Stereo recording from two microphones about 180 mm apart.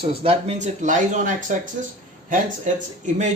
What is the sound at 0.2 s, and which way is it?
Speech, 35° right (ahead or behind).